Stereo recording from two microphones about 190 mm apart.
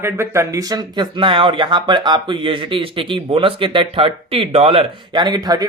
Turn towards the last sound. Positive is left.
turn(degrees=-20)  # may be behind; listen again after turning